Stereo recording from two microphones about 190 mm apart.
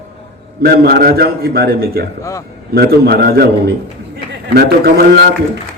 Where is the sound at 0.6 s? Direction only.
55° right (ahead or behind).